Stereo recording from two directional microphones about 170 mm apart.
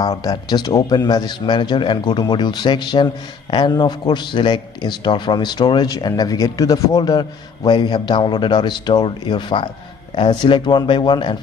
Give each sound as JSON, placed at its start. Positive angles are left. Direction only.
{"t": 0.2, "sound": "a man's voice", "side_deg": 25}